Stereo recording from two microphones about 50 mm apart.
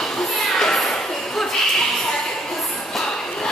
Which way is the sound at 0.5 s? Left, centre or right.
Centre.